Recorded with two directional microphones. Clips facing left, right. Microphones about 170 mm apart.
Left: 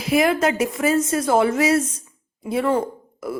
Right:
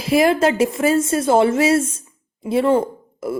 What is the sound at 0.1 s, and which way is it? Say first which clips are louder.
A woman's voice: right 3 dB; 30° right (ahead or behind).